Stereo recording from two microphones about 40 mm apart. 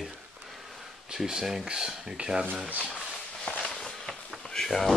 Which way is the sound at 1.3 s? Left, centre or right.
Centre.